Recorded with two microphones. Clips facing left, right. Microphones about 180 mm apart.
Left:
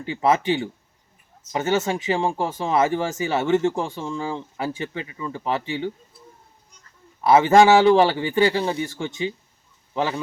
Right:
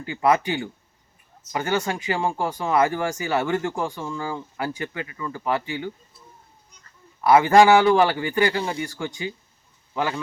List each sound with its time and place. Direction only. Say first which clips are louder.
0.0 s speech: even; 25° left (ahead or behind)
7.3 s speech: even; 25° left (ahead or behind)